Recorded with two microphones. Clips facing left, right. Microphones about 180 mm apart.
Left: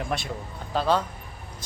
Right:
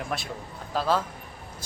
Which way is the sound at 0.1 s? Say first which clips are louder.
Left 2 dB; centre (ahead or behind).